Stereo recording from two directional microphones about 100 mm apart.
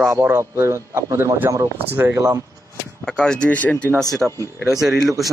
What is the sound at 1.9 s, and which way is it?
Speech, 20° right (ahead or behind).